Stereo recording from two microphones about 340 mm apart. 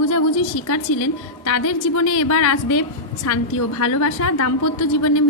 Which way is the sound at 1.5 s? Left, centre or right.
Left.